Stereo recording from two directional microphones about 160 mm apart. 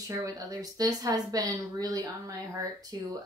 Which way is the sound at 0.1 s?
20° right (ahead or behind).